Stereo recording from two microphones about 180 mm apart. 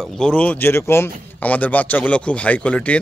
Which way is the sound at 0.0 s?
5° left (ahead or behind).